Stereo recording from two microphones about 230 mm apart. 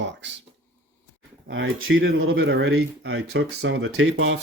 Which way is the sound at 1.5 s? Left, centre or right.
Right.